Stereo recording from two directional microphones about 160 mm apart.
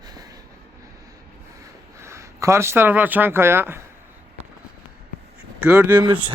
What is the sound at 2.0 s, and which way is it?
Speech, 20° right (ahead or behind).